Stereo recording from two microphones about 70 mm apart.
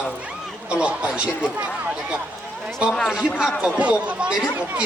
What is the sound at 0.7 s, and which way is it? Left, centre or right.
Speech, centre.